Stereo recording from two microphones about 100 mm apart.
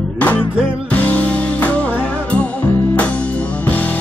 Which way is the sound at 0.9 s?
15° left (ahead or behind).